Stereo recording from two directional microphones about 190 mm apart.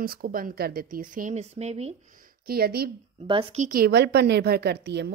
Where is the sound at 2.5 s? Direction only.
55° right (ahead or behind).